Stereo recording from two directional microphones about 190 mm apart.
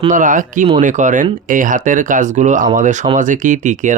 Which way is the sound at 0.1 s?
45° right (ahead or behind).